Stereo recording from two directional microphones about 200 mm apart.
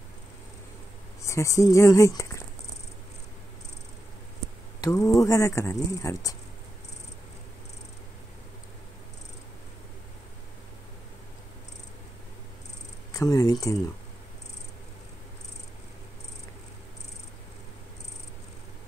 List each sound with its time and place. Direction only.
1.2 s speech: 15° left (ahead or behind)
4.8 s speech: 15° left (ahead or behind)
13.1 s speech: 15° left (ahead or behind)